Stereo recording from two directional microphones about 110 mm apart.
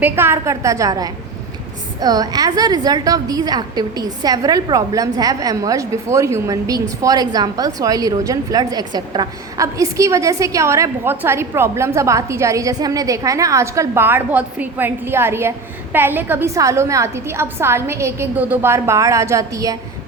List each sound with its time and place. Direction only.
0.0 s a woman's voice: 20° right (ahead or behind)